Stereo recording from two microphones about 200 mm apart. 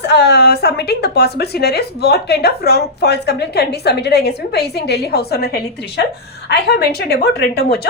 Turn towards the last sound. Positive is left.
turn(degrees=55)  # may be behind; listen again after turning